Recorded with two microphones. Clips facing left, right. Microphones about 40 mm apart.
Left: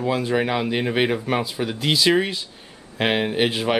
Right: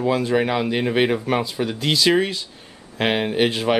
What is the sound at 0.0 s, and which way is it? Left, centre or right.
Speech, centre.